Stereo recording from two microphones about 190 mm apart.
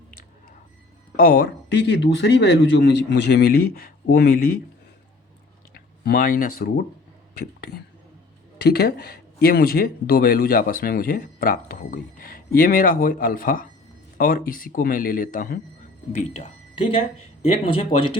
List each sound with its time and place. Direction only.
1.1 s speech: 55° left (ahead or behind)
5.7 s speech: 50° left (ahead or behind)
16.1 s speech: 30° left (ahead or behind)